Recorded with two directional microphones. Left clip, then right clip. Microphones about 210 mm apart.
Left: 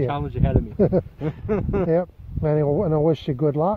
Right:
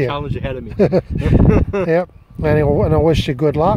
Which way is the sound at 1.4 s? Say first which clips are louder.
Right 4 dB; 15° left (ahead or behind).